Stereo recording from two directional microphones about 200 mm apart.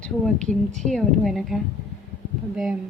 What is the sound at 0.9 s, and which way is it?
Speech, centre (ahead or behind).